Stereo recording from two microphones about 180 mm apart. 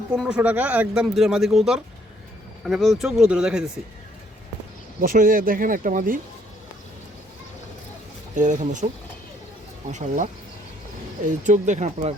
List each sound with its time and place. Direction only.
0.2 s speech: 5° right (ahead or behind)
4.9 s speech: 50° right (ahead or behind)
8.4 s speech: 45° right (ahead or behind)
11.4 s speech: 45° right (ahead or behind)